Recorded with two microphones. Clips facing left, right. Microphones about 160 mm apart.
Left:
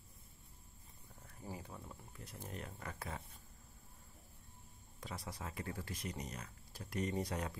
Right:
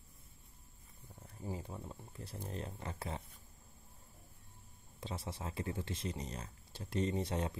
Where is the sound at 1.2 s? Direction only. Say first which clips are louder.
Right 5 dB; 20° right (ahead or behind).